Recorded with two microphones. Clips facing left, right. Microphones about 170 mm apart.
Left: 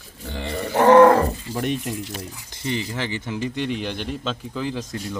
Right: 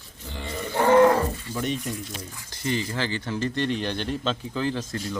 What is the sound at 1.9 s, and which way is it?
Speech, 80° left.